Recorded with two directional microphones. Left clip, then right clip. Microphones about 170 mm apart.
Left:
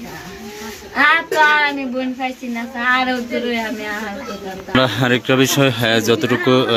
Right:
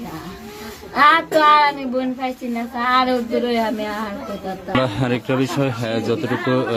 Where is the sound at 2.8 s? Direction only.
50° right (ahead or behind).